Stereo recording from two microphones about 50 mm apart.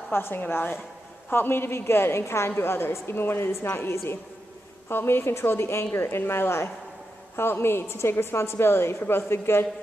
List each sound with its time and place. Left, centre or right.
0.1 s a woman's voice: left
4.8 s a woman's voice: left